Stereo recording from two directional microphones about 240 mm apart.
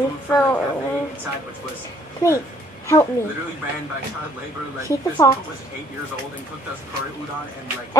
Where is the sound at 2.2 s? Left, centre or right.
Centre.